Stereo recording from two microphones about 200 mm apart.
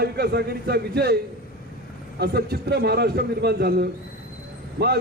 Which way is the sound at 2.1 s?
55° right (ahead or behind).